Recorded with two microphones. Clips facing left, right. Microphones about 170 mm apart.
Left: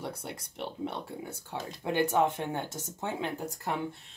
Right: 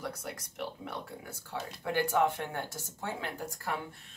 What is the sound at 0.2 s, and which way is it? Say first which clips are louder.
Speech: left 1 dB; 30° left (ahead or behind).